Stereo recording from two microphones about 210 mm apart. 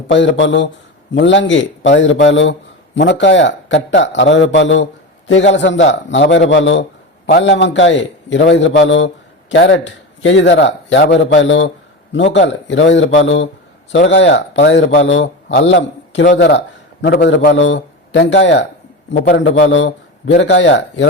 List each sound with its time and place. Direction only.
0.1 s a man's voice: 60° left (ahead or behind)